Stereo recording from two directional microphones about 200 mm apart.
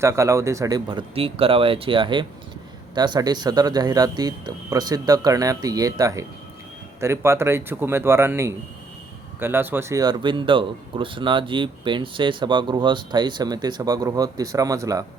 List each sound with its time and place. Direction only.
0.0 s speech: 15° right (ahead or behind)